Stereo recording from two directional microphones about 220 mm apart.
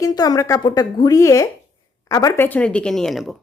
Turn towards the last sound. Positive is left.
turn(degrees=0)  # may be behind; listen again after turning